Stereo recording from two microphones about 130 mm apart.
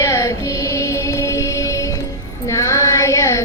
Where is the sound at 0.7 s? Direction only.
25° left (ahead or behind).